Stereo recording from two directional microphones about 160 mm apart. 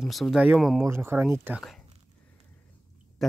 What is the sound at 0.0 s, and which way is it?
Speech, centre (ahead or behind).